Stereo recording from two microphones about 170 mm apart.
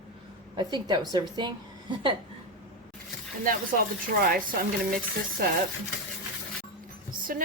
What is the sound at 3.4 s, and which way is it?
A woman's voice, 55° right (ahead or behind).